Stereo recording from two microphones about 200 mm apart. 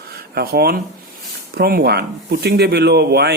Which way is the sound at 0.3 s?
50° right (ahead or behind).